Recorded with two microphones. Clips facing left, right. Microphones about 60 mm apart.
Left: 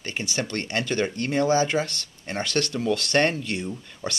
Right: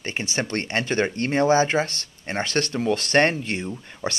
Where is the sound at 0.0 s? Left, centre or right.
Right.